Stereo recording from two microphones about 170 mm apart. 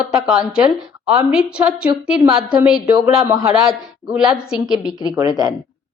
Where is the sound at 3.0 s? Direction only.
15° right (ahead or behind).